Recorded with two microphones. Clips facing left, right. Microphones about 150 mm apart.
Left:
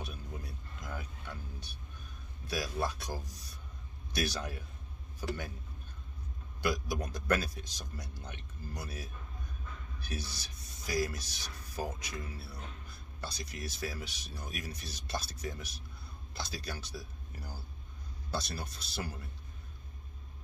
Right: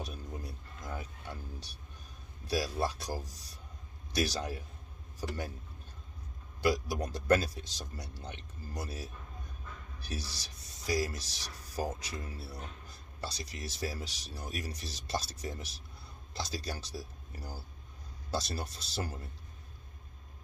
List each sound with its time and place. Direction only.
0.0 s a sound: 35° right (ahead or behind)
2.4 s speech: 35° right (ahead or behind)
6.6 s speech: 35° right (ahead or behind)